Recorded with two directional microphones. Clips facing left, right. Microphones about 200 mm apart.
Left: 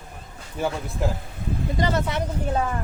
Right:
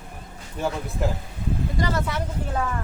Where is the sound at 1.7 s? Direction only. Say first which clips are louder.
Left 4 dB; 20° left (ahead or behind).